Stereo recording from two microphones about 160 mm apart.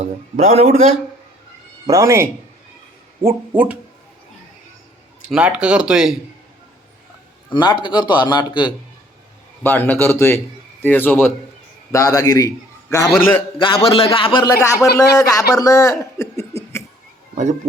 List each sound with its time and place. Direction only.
0.0 s a man's voice: 45° right (ahead or behind)
1.9 s speech: 20° right (ahead or behind)
3.2 s speech: 10° right (ahead or behind)
5.3 s speech: 5° right (ahead or behind)
7.5 s a man's voice: 30° left (ahead or behind)
9.6 s a man's voice: 10° left (ahead or behind)
13.6 s a man's voice: 30° left (ahead or behind)